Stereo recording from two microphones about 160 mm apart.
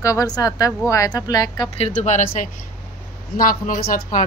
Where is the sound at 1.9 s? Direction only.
50° left (ahead or behind).